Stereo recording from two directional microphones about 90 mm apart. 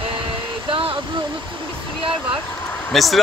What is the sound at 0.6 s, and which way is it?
Speech, 75° right (ahead or behind).